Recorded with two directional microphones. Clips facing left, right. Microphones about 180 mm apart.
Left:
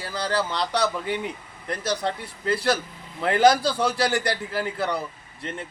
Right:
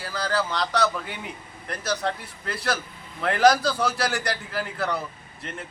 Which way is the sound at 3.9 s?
25° left (ahead or behind).